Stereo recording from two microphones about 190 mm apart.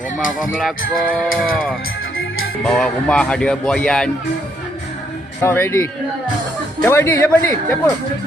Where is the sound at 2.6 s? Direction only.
5° left (ahead or behind).